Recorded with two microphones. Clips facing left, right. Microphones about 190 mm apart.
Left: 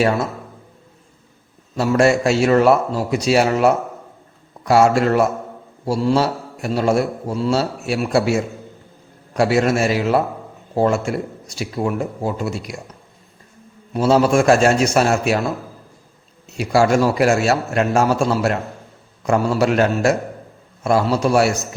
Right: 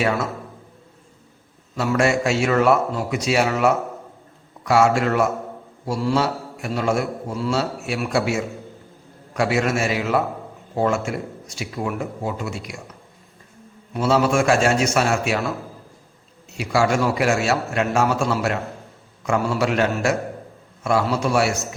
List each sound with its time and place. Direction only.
1.7 s a man's voice: 35° left (ahead or behind)
13.9 s a man's voice: 40° left (ahead or behind)
16.6 s a man's voice: 40° left (ahead or behind)